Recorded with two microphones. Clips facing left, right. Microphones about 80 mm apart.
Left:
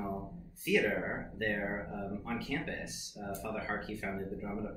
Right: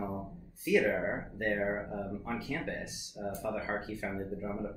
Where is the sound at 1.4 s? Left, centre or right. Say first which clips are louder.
Right 3 dB; right.